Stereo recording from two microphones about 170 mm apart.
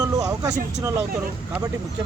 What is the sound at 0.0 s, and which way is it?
Vehicle, 20° right (ahead or behind).